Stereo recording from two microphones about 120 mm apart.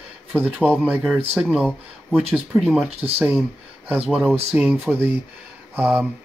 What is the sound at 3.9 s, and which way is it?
Speech, 5° right (ahead or behind).